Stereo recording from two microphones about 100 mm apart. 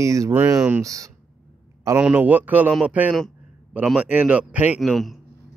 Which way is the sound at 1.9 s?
15° right (ahead or behind).